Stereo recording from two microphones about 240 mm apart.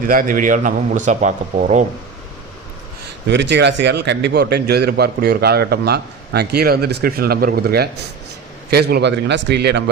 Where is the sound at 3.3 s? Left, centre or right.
Right.